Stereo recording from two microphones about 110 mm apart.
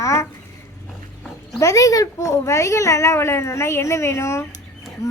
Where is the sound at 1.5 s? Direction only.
30° left (ahead or behind).